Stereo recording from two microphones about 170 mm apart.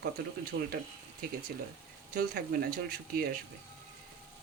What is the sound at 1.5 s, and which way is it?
Speech, 65° right (ahead or behind).